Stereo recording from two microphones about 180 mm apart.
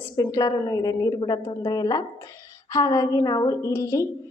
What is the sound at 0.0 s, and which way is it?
A woman's voice, 20° left (ahead or behind).